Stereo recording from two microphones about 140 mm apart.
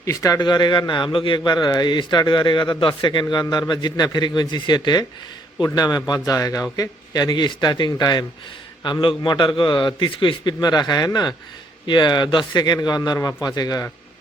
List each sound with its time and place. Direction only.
0.0 s a man's voice: 25° left (ahead or behind)